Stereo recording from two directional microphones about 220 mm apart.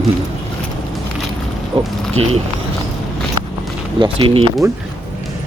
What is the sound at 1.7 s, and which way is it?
Speech, 25° right (ahead or behind).